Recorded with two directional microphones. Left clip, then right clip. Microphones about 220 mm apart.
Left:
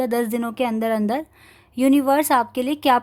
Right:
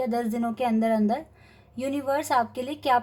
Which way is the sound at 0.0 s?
40° left (ahead or behind).